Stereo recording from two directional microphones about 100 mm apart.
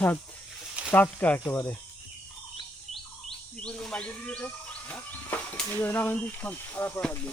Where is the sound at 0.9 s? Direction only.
15° left (ahead or behind).